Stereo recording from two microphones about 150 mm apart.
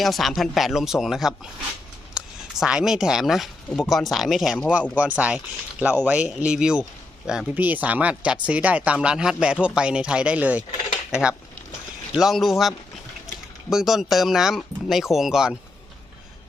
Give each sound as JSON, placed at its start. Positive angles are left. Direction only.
{"t": 0.0, "sound": "speech", "side_deg": 0}
{"t": 10.7, "sound": "dishes", "side_deg": 35}
{"t": 11.1, "sound": "speech", "side_deg": -5}